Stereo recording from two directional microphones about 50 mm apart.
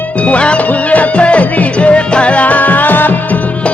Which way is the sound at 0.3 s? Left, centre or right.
Left.